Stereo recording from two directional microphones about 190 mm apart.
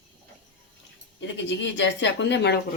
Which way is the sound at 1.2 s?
70° left (ahead or behind).